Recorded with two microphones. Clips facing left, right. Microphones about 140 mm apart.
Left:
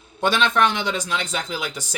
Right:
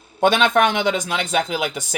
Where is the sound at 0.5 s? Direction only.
55° right (ahead or behind).